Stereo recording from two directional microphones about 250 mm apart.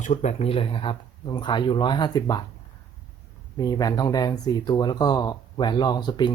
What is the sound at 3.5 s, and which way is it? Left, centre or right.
Speech, centre.